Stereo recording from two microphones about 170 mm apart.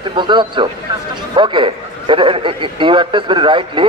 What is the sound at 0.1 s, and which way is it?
A man's voice, 30° right (ahead or behind).